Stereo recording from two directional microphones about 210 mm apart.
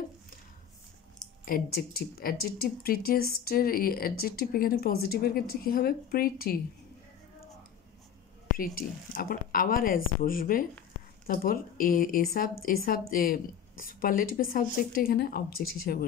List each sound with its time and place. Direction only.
1.4 s speech: 45° left (ahead or behind)
8.7 s speech: 45° left (ahead or behind)